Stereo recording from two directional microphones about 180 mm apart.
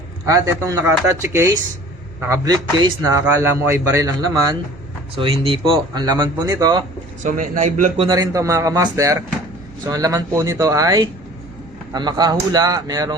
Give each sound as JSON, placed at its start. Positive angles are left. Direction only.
{"t": 0.3, "sound": "speech", "side_deg": -20}
{"t": 5.1, "sound": "speech", "side_deg": -30}
{"t": 7.2, "sound": "a man's voice", "side_deg": -45}
{"t": 7.9, "sound": "speech", "side_deg": -25}